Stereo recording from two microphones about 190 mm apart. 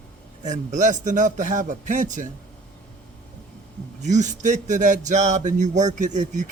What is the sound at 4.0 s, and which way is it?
Speech, 40° right (ahead or behind).